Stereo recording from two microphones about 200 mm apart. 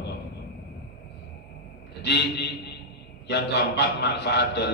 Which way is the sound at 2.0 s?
60° left (ahead or behind).